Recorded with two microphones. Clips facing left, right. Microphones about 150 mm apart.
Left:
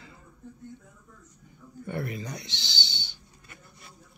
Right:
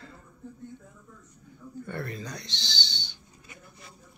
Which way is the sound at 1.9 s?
15° left (ahead or behind).